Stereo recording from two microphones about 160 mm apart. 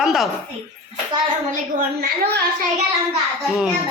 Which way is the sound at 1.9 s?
70° right (ahead or behind).